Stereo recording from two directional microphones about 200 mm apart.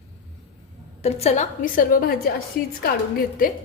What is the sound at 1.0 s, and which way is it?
A woman's voice, 30° left (ahead or behind).